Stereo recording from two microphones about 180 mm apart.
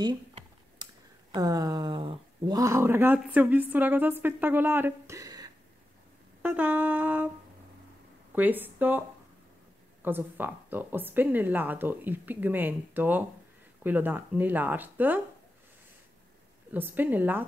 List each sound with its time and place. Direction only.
0.8 s a sound: 25° right (ahead or behind)
1.3 s speech: 20° right (ahead or behind)
6.4 s speech: 10° right (ahead or behind)
8.4 s speech: 10° right (ahead or behind)
10.0 s speech: 10° right (ahead or behind)
16.7 s speech: 10° right (ahead or behind)